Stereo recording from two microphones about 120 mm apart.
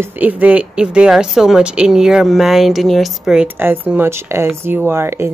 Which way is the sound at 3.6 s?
15° right (ahead or behind).